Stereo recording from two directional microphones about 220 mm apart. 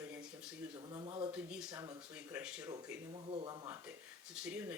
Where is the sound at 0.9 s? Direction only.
20° right (ahead or behind).